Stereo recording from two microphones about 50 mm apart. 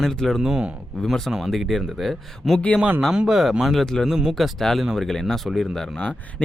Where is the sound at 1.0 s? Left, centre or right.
Centre.